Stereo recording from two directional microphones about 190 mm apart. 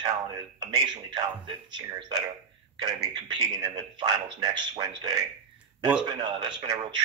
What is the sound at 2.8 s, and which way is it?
A man's voice, 25° right (ahead or behind).